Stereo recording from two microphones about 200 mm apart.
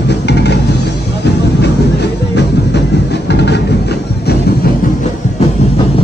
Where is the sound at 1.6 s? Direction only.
55° left (ahead or behind).